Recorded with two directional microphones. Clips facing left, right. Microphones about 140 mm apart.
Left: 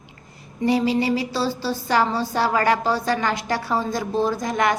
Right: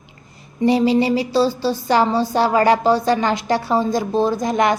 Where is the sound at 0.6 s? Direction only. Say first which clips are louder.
Right 4 dB; 25° right (ahead or behind).